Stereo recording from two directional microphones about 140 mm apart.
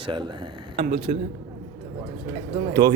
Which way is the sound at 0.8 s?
50° right (ahead or behind).